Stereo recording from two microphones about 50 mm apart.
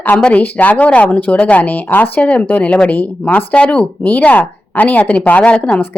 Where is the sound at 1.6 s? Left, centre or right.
Left.